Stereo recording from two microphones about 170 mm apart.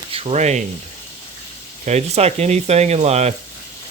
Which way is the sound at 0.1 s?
35° right (ahead or behind).